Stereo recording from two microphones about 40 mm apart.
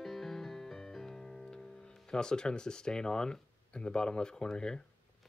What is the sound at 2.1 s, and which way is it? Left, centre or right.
Speech, centre.